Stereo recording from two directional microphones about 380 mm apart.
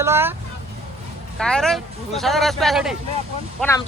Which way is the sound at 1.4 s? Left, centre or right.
Centre.